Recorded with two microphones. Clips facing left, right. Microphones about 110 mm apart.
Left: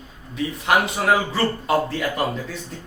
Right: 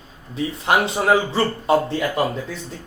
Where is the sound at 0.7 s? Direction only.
30° right (ahead or behind).